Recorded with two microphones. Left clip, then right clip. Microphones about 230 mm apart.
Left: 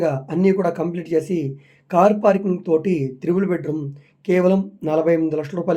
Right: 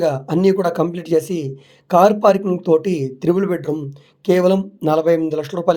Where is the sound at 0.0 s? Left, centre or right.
Right.